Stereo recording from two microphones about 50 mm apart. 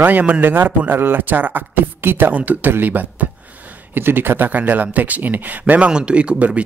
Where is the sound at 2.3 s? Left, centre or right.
Right.